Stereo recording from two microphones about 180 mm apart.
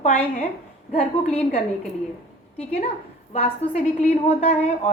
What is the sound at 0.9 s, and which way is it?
Speech, 35° left (ahead or behind).